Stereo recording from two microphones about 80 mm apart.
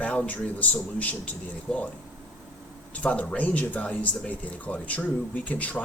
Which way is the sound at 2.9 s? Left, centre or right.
Centre.